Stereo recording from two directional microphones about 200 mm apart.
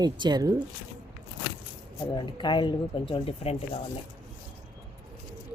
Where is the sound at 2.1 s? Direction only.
25° left (ahead or behind).